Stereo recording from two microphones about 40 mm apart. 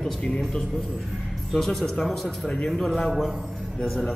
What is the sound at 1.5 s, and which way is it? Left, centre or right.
A man's voice, centre.